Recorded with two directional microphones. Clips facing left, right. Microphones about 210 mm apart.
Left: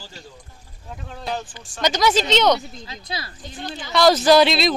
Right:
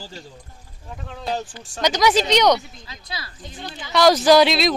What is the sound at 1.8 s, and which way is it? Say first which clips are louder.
Speech: right 1 dB; 15° right (ahead or behind).